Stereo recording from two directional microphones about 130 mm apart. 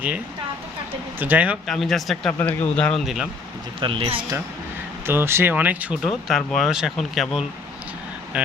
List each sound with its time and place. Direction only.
1.2 s speech: 15° right (ahead or behind)
1.6 s speech: centre (ahead or behind)
2.4 s speech: 15° left (ahead or behind)
3.8 s speech: 40° right (ahead or behind)
5.0 s speech: 20° right (ahead or behind)
6.0 s speech: centre (ahead or behind)